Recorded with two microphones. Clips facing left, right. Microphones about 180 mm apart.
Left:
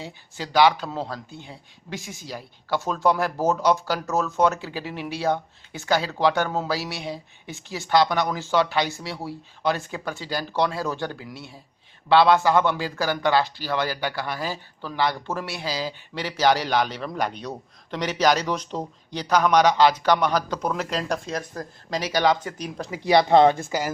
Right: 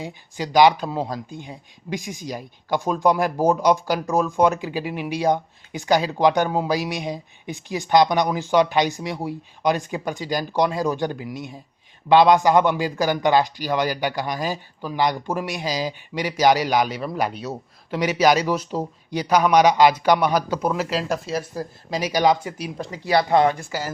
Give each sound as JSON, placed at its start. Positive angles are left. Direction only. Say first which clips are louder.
{"t": 0.0, "sound": "a man's voice", "louder": "right 5 dB", "side_deg": -15}
{"t": 23.0, "sound": "speech", "louder": "left 2 dB", "side_deg": 25}